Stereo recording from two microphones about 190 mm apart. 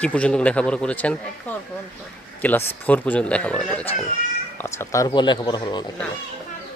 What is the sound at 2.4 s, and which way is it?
Speech, 10° left (ahead or behind).